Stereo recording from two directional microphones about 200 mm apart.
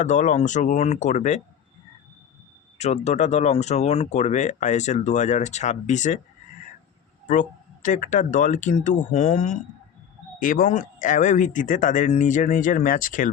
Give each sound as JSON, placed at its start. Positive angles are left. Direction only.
{"t": 0.0, "sound": "speech", "side_deg": 35}
{"t": 2.7, "sound": "speech", "side_deg": 35}
{"t": 7.3, "sound": "speech", "side_deg": 40}